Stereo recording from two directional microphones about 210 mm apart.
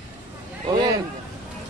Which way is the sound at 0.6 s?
20° right (ahead or behind).